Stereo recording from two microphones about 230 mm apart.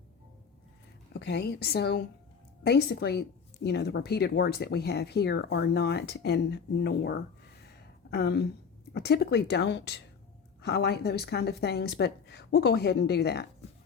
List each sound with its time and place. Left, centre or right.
1.1 s speech: left